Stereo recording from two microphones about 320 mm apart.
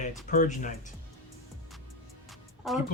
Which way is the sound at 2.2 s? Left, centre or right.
Centre.